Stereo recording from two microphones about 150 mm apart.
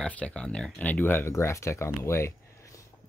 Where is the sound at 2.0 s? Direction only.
20° left (ahead or behind).